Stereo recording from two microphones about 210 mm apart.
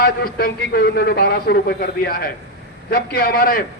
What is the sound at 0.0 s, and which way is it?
A man's voice, 45° left (ahead or behind).